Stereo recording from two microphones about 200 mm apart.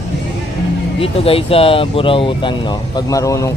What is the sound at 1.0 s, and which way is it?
Speech, 30° left (ahead or behind).